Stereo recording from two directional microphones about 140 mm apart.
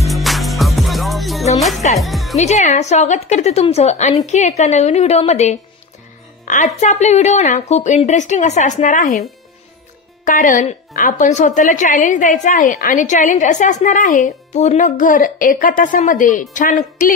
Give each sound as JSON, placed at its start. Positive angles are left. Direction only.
{"t": 0.0, "sound": "music", "side_deg": 0}
{"t": 2.0, "sound": "speech", "side_deg": 0}
{"t": 2.3, "sound": "a woman's voice", "side_deg": 55}
{"t": 10.2, "sound": "a woman's voice", "side_deg": 75}